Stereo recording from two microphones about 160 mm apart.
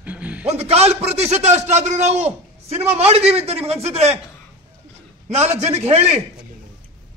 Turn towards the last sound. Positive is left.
turn(degrees=-40)  # may be behind; listen again after turning